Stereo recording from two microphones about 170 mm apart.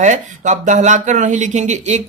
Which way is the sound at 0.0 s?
45° right (ahead or behind).